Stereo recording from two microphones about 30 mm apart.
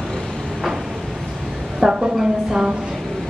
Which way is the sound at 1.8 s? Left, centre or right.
Right.